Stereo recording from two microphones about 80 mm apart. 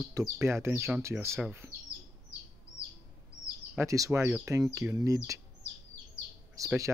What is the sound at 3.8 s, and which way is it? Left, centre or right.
Speech, right.